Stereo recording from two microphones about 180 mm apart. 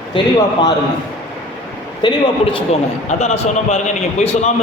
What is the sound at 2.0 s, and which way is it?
Speech, 25° left (ahead or behind).